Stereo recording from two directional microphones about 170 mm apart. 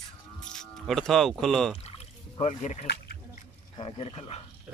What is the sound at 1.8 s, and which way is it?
Rowboat, 40° left (ahead or behind).